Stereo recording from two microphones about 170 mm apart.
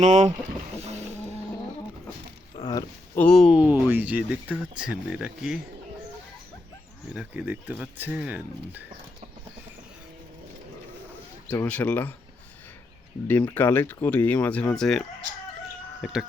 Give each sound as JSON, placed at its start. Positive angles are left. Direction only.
{"t": 0.0, "sound": "speech", "side_deg": -45}
{"t": 2.6, "sound": "a sound", "side_deg": 30}
{"t": 3.2, "sound": "speech", "side_deg": 5}
{"t": 7.1, "sound": "speech", "side_deg": -5}
{"t": 11.4, "sound": "speech", "side_deg": 10}
{"t": 13.2, "sound": "speech", "side_deg": 10}